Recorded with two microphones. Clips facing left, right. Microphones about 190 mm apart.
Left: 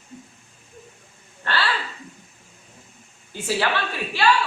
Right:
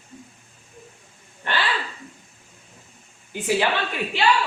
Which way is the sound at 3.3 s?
15° right (ahead or behind).